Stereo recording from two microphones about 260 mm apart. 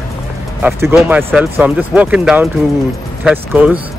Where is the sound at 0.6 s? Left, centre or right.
Centre.